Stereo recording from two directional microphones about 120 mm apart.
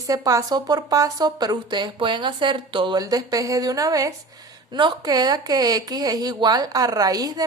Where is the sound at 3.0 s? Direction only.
30° right (ahead or behind).